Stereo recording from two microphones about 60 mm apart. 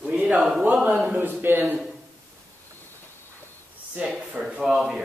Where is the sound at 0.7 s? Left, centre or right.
Right.